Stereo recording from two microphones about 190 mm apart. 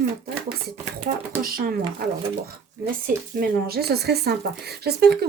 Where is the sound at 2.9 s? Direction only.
50° right (ahead or behind).